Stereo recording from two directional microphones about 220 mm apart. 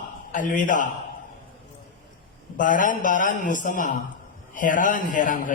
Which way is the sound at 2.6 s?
35° left (ahead or behind).